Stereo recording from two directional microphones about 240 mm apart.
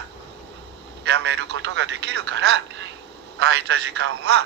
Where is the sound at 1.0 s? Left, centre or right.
Right.